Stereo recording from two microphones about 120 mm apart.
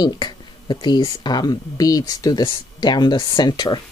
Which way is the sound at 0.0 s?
35° left (ahead or behind).